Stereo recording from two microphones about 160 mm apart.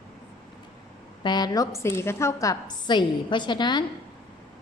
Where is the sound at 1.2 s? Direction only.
25° left (ahead or behind).